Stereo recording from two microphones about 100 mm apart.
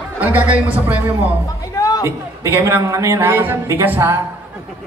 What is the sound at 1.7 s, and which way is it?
Music, 40° left (ahead or behind).